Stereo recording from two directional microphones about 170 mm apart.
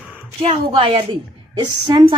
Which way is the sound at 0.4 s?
35° right (ahead or behind).